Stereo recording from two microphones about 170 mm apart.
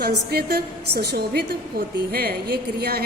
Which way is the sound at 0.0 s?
65° right (ahead or behind).